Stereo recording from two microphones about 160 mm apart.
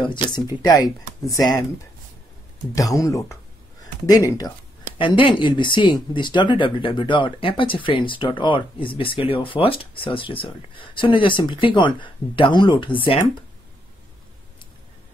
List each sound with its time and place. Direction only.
0.0 s speech: 30° left (ahead or behind)
2.7 s speech: 20° left (ahead or behind)
4.9 s speech: 30° left (ahead or behind)